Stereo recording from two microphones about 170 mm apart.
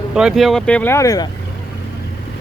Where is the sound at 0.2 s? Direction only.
Centre (ahead or behind); by 1.3 s 20° left (ahead or behind).